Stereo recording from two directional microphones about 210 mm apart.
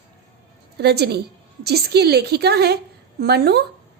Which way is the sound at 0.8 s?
50° right (ahead or behind).